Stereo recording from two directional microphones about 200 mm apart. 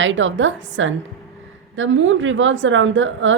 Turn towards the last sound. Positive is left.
turn(degrees=-70)  # may be behind; listen again after turning